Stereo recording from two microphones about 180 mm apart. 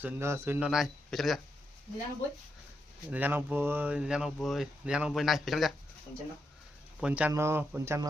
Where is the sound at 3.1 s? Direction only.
10° right (ahead or behind).